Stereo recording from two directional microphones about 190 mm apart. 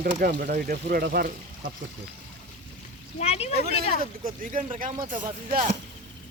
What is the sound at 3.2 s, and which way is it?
Speech, 35° left (ahead or behind).